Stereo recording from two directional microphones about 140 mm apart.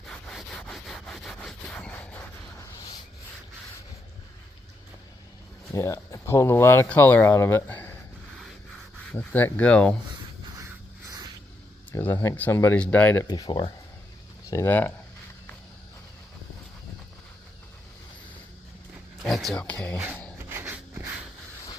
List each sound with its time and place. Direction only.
0.3 s sawing: centre (ahead or behind)
2.6 s a sound: 30° left (ahead or behind)
5.7 s speech: 20° left (ahead or behind)
9.1 s speech: 10° left (ahead or behind)
10.6 s a sound: 25° right (ahead or behind)
11.9 s speech: 15° left (ahead or behind)
13.2 s speech: 30° left (ahead or behind)
14.5 s speech: 15° left (ahead or behind)
19.2 s speech: centre (ahead or behind)
20.5 s a sound: 15° right (ahead or behind)